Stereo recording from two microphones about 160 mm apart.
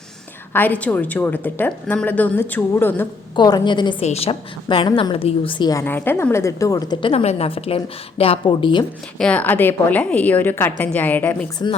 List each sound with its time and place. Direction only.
0.5 s a woman's voice: 10° left (ahead or behind)
3.3 s a woman's voice: 25° left (ahead or behind)
4.0 s a woman's voice: 40° left (ahead or behind)
5.8 s a woman's voice: 15° left (ahead or behind)
7.1 s a woman's voice: 40° left (ahead or behind)
9.1 s a woman's voice: 5° left (ahead or behind)
11.6 s a woman's voice: 25° left (ahead or behind)